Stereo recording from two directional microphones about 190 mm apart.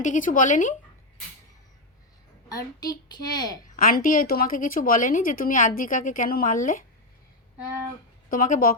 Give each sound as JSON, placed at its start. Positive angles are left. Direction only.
{"t": 0.0, "sound": "a woman's voice", "side_deg": 40}
{"t": 2.5, "sound": "a woman's voice", "side_deg": 20}
{"t": 3.8, "sound": "a woman's voice", "side_deg": 50}
{"t": 8.3, "sound": "a woman's voice", "side_deg": 45}